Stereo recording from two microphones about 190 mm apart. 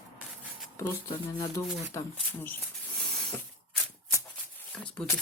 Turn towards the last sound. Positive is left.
turn(degrees=5)  # may be behind; listen again after turning